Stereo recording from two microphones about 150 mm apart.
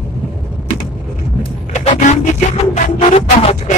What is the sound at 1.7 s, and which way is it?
Vehicle, 50° left (ahead or behind).